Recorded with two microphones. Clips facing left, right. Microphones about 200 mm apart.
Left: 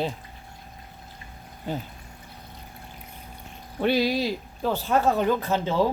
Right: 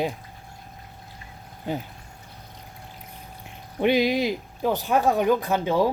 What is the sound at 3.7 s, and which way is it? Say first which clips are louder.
Speech: right 2 dB; 15° right (ahead or behind).